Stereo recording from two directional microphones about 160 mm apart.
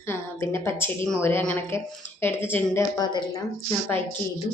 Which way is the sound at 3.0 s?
25° left (ahead or behind).